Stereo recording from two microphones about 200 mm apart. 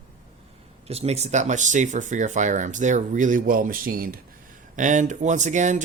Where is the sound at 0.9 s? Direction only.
30° right (ahead or behind).